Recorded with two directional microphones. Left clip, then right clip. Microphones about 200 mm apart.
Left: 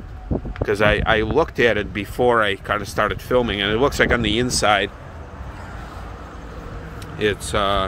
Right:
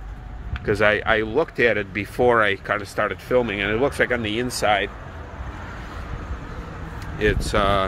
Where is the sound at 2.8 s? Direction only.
15° left (ahead or behind).